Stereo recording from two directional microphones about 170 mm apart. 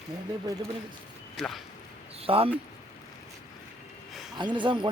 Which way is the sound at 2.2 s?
35° right (ahead or behind).